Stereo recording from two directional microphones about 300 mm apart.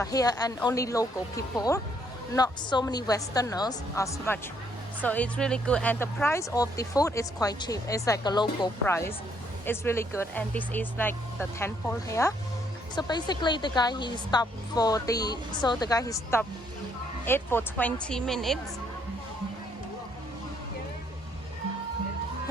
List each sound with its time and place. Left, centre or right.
0.0 s speech: centre